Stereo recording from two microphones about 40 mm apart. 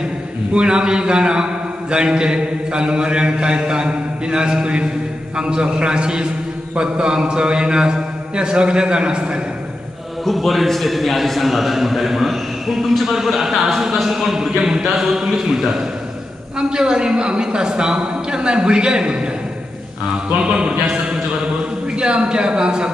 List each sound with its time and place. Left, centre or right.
0.6 s a man's voice: right
10.2 s a man's voice: centre; by 19.1 s right
20.4 s a man's voice: right
21.9 s a man's voice: right